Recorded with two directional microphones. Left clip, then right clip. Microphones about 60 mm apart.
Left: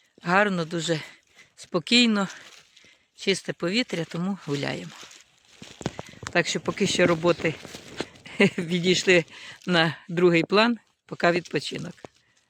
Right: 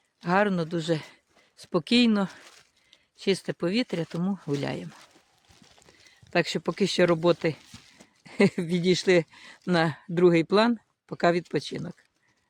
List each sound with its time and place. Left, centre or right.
0.2 s speech: right
1.5 s speech: right
1.8 s speech: right
3.2 s speech: right
6.3 s speech: right; by 11.9 s centre